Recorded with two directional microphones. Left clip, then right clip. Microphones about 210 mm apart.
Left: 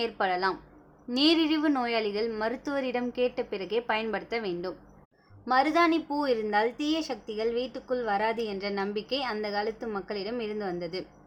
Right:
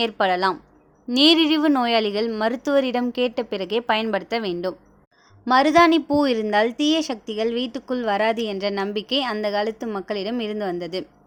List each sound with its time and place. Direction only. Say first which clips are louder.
0.0 s a woman's voice: right 7 dB; 35° right (ahead or behind)